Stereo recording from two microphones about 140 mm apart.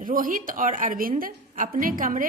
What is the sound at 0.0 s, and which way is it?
A woman's voice, 75° right (ahead or behind).